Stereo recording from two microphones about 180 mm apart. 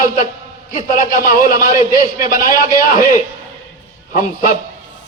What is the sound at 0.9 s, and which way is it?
A man's voice, 50° left (ahead or behind).